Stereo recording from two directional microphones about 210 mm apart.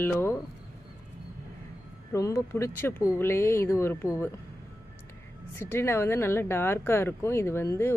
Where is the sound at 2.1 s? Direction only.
15° left (ahead or behind).